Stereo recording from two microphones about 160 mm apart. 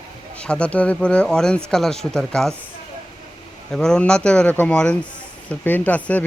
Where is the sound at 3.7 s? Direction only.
5° left (ahead or behind).